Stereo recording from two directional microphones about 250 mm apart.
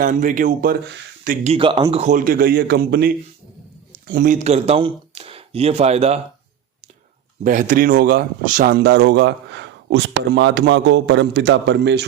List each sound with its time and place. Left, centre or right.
0.0 s a man's voice: right
1.5 s a man's voice: right
7.4 s speech: right